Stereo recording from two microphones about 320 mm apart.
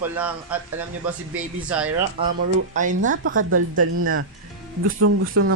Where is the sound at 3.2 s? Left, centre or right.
Right.